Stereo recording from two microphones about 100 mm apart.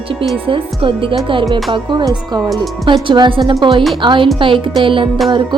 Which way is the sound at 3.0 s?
50° right (ahead or behind).